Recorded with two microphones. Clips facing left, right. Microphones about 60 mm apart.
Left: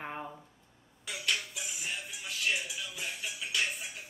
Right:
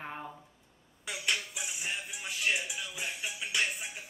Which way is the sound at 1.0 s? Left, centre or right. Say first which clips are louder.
Right 1 dB; centre.